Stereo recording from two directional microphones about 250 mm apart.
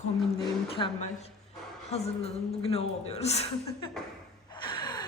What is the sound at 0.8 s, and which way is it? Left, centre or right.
A woman's voice, left.